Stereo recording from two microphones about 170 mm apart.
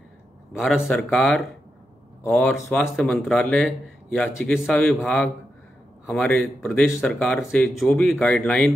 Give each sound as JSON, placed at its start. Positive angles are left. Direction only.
{"t": 0.6, "sound": "speech", "side_deg": 0}